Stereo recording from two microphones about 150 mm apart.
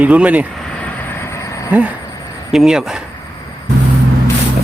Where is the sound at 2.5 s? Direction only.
5° right (ahead or behind).